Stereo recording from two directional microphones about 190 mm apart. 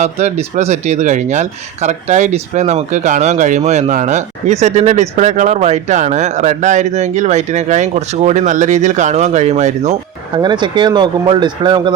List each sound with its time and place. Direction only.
0.0 s speech: 35° right (ahead or behind)
10.3 s speech: 25° right (ahead or behind)